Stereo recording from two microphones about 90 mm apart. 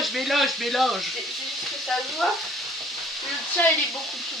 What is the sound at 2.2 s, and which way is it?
Stir, centre (ahead or behind).